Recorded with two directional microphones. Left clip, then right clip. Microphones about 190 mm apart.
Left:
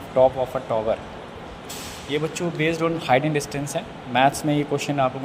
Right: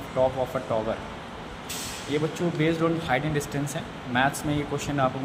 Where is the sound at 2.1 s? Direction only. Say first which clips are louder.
Left 2 dB; 30° left (ahead or behind).